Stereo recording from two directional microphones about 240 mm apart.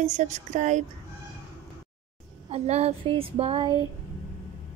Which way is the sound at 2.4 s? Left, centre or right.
Right.